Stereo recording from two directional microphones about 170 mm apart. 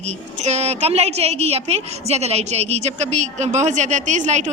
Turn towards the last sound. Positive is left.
turn(degrees=-45)  # may be behind; listen again after turning